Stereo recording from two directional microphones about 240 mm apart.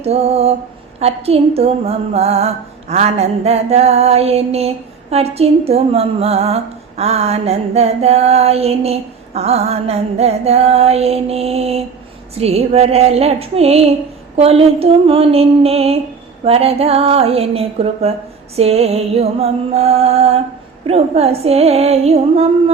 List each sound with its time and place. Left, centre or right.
0.0 s a woman's voice: right